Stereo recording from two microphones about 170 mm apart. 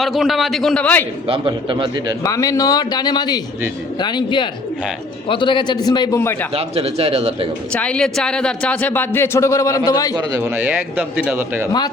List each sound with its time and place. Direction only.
0.0 s a man's voice: centre (ahead or behind)
1.3 s a man's voice: 30° right (ahead or behind)
2.2 s a man's voice: 20° left (ahead or behind)
6.5 s speech: 35° right (ahead or behind)
7.7 s speech: 5° left (ahead or behind)
10.4 s speech: 10° right (ahead or behind)